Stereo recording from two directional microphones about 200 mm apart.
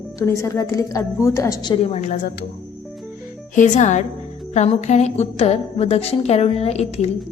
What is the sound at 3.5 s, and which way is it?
A woman's voice, 35° left (ahead or behind).